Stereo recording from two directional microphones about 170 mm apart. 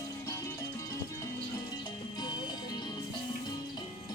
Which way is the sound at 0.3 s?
15° left (ahead or behind).